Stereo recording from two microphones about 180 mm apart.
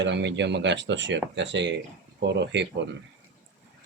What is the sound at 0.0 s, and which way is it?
Speech, 75° right (ahead or behind).